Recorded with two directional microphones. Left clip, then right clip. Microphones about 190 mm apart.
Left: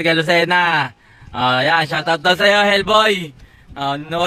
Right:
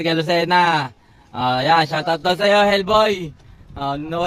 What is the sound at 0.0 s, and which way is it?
Speech, 5° right (ahead or behind).